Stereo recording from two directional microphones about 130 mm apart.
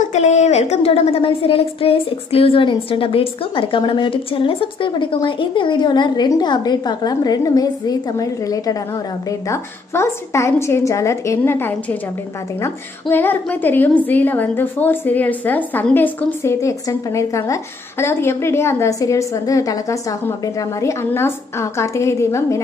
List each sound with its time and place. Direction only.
0.0 s a woman's voice: 60° left (ahead or behind); by 12.0 s 15° left (ahead or behind)
13.1 s a woman's voice: 15° left (ahead or behind)